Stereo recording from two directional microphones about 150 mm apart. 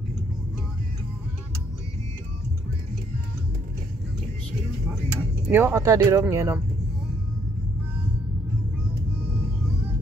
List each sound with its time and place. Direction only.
5.5 s speech: 15° right (ahead or behind)